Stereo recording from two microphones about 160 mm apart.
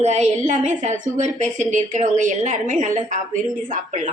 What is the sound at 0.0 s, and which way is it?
A woman's voice, 45° right (ahead or behind).